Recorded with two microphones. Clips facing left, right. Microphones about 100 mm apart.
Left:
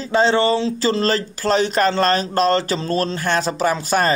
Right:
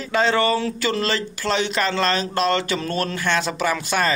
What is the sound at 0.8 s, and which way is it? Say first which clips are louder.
Speech: left 4 dB; 35° left (ahead or behind).